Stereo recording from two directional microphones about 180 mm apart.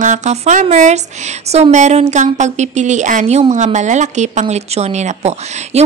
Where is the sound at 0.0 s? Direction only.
40° right (ahead or behind).